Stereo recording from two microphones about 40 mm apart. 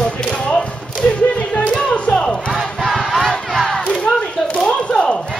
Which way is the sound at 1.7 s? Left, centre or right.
Left.